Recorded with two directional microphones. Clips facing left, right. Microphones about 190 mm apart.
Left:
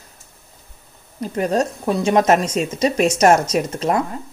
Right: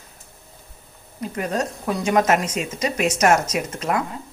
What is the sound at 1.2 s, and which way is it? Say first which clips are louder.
Speech: left 5 dB; 30° left (ahead or behind).